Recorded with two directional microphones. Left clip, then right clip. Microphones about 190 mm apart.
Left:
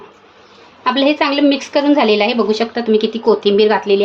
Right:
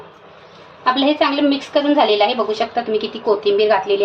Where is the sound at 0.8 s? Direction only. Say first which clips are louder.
Left 1 dB; 50° left (ahead or behind).